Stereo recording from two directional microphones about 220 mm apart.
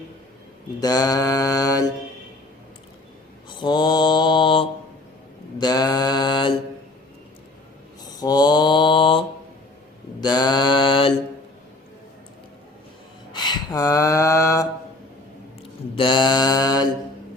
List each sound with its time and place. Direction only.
0.8 s mantra: 15° left (ahead or behind)
3.5 s mantra: 20° left (ahead or behind)
8.2 s mantra: 20° left (ahead or behind)
13.3 s a sound: 20° left (ahead or behind)
16.0 s mantra: 20° left (ahead or behind)